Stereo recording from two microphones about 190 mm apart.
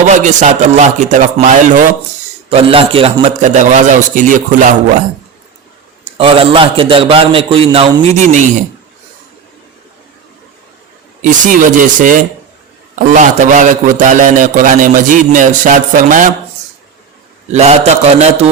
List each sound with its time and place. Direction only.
0.1 s a man's voice: 40° right (ahead or behind)
2.5 s a man's voice: 30° right (ahead or behind)
6.1 s a man's voice: 30° right (ahead or behind)
11.2 s a man's voice: 45° right (ahead or behind)
17.5 s a man's voice: 35° right (ahead or behind)